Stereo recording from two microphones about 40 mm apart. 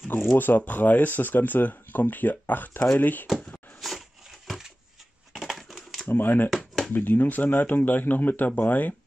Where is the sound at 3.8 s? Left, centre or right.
Centre.